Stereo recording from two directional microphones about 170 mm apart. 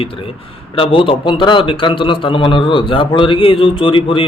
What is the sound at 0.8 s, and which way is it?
A man's voice, 30° left (ahead or behind).